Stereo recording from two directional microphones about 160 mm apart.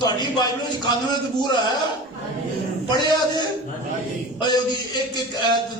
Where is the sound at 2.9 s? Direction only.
30° left (ahead or behind).